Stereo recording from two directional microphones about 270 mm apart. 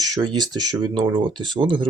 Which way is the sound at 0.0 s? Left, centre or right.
Centre.